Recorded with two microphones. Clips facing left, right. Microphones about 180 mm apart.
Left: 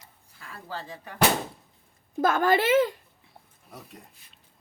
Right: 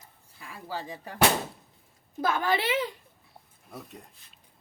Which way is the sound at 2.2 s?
50° left (ahead or behind).